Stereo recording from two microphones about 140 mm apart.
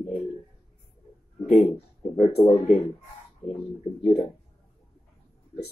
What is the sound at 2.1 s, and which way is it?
Speech, 50° left (ahead or behind).